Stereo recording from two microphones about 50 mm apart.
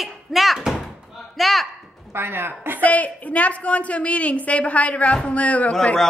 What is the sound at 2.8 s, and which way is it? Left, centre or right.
A woman's voice, left.